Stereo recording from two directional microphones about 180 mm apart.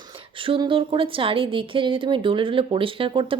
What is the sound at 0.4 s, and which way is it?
Speech, 30° right (ahead or behind).